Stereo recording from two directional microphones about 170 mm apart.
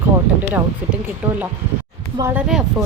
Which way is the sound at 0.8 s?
5° right (ahead or behind).